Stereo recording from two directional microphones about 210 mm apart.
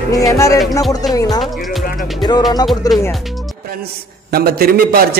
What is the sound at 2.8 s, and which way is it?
Speech, 15° left (ahead or behind).